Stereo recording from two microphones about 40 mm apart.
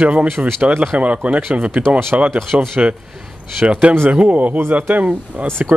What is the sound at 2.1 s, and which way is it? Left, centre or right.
Speech, right.